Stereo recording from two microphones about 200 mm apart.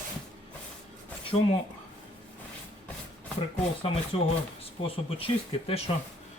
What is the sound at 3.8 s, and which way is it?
Speech, 30° left (ahead or behind).